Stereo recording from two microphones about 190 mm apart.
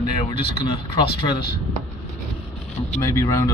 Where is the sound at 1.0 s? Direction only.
55° left (ahead or behind).